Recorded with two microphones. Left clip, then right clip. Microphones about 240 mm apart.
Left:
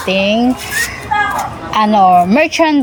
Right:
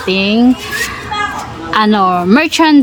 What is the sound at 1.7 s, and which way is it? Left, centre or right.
Speech, centre.